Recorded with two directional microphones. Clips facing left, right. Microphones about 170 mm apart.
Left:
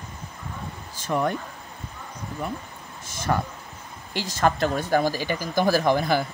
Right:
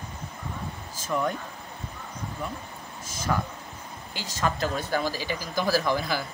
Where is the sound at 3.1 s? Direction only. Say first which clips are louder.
Left 3 dB; 60° left (ahead or behind).